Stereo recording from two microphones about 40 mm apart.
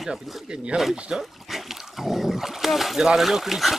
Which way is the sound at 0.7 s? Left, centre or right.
Right.